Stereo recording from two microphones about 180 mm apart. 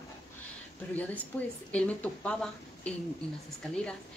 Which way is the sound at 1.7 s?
5° left (ahead or behind).